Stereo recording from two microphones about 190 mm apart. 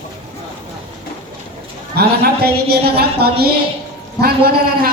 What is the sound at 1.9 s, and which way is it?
A woman's voice, 55° right (ahead or behind).